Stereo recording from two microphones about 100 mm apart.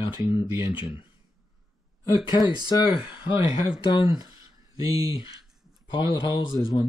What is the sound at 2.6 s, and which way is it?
Speech, 55° left (ahead or behind).